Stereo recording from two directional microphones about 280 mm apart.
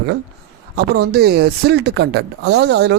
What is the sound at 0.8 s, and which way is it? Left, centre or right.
Speech, right.